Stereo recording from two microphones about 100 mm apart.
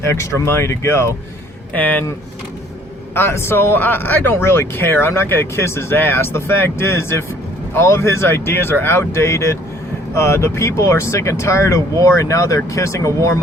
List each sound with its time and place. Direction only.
0.0 s speech: 30° left (ahead or behind)
1.7 s speech: 15° left (ahead or behind)
3.2 s speech: 25° left (ahead or behind)